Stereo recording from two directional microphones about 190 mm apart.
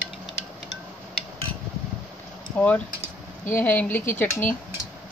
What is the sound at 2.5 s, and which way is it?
Speech, 10° left (ahead or behind).